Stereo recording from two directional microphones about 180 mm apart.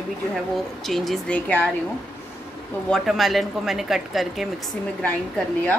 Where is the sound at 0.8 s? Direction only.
Centre (ahead or behind).